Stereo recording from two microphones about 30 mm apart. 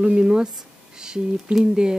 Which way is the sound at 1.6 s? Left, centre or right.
Right.